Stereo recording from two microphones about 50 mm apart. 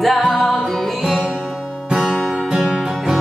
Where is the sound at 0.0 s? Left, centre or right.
Centre.